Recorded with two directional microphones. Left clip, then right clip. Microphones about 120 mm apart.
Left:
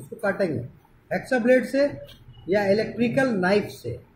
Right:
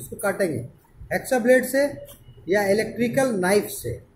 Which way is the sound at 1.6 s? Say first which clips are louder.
Right 1 dB; 15° right (ahead or behind).